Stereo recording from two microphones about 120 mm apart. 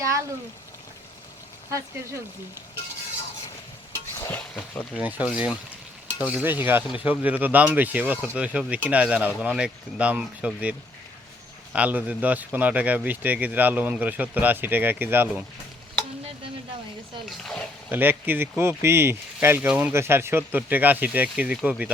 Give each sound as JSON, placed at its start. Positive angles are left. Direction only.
{"t": 0.0, "sound": "a sound", "side_deg": -25}
{"t": 4.3, "sound": "stir", "side_deg": 15}
{"t": 4.9, "sound": "speech", "side_deg": -10}
{"t": 17.2, "sound": "speech", "side_deg": 5}
{"t": 17.8, "sound": "speech", "side_deg": -15}